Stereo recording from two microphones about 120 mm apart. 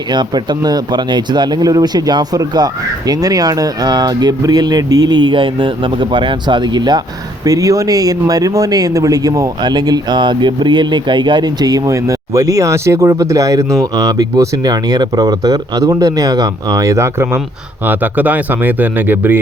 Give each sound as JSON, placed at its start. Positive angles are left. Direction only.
{"t": 0.1, "sound": "speech", "side_deg": -35}